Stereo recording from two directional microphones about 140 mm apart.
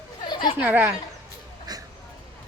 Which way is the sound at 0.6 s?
15° right (ahead or behind).